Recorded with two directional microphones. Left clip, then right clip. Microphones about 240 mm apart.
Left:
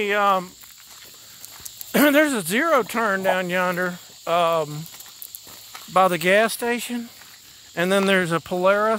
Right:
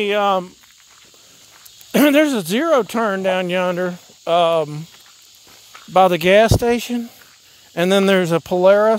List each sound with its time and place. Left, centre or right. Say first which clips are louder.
0.0 s speech: right 3 dB; right
1.9 s speech: right 3 dB; right
5.9 s speech: right 5 dB; right